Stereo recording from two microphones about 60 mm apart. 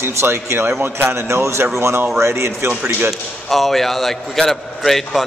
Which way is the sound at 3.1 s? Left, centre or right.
Centre.